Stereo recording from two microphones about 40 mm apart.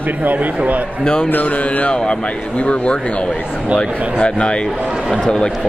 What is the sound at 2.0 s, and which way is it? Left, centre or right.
Speech, left.